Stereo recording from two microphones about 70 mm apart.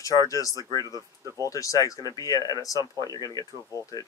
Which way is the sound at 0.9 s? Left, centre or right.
Right.